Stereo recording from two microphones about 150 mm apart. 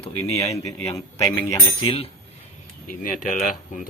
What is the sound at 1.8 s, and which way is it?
Speech, 40° left (ahead or behind).